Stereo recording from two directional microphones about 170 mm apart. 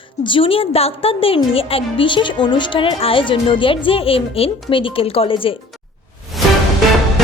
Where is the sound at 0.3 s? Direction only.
30° left (ahead or behind).